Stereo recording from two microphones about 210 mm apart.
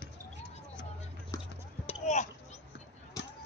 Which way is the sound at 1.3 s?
15° left (ahead or behind).